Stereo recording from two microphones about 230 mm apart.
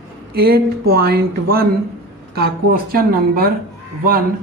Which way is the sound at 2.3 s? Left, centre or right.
Right.